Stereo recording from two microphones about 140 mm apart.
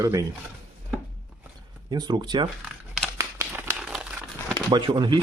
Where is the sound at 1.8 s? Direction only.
30° right (ahead or behind).